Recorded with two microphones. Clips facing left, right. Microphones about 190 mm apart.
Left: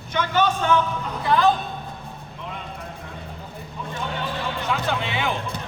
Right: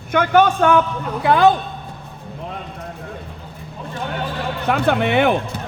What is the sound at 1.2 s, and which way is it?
Speech, 70° right (ahead or behind).